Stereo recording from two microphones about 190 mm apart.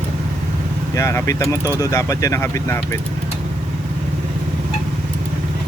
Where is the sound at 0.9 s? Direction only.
15° left (ahead or behind).